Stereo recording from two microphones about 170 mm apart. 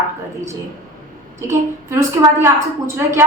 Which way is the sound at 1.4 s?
15° right (ahead or behind).